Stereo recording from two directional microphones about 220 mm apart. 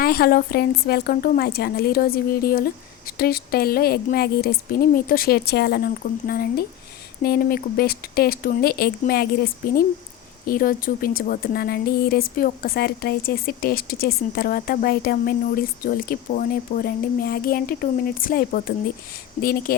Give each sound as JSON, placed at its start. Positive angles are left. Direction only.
{"t": 0.0, "sound": "speech", "side_deg": 45}